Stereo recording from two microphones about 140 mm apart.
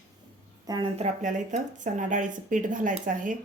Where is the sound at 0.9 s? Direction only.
60° right (ahead or behind).